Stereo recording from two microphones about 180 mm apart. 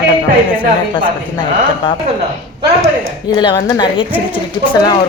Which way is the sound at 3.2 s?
25° left (ahead or behind).